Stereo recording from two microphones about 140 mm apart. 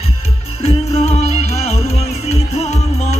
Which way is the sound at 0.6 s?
45° left (ahead or behind).